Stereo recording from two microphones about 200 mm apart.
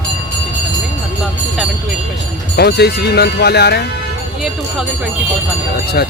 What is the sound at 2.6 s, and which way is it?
A man's voice, 55° left (ahead or behind).